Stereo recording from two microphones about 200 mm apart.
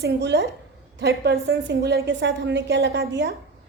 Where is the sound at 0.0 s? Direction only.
55° right (ahead or behind).